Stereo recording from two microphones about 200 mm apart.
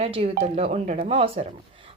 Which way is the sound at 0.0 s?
30° right (ahead or behind).